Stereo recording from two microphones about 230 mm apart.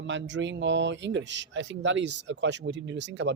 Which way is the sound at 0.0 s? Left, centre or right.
Right.